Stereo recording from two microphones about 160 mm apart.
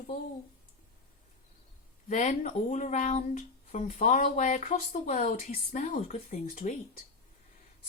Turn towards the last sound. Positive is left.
turn(degrees=60)  # may be behind; listen again after turning